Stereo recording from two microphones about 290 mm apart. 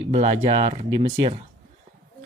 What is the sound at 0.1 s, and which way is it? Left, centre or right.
Speech, right.